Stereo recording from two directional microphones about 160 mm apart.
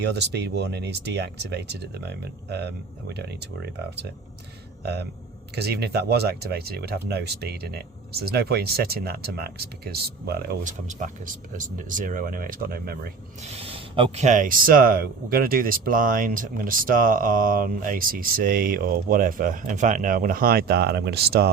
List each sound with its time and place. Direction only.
0.0 s speech: 90° right
10.6 s speech: 50° right (ahead or behind); by 13.0 s 65° right (ahead or behind)
13.4 s speech: 35° right (ahead or behind)
14.3 s speech: 55° right (ahead or behind); by 21.5 s 80° right